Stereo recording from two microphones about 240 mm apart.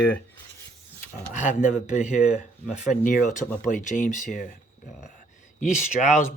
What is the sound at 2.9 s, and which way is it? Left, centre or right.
Speech, left.